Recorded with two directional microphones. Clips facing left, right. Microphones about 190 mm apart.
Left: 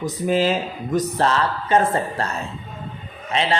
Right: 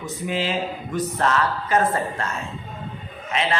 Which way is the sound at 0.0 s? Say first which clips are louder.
Left 6 dB; 40° left (ahead or behind).